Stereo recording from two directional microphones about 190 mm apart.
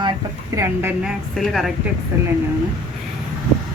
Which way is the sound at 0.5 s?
15° right (ahead or behind).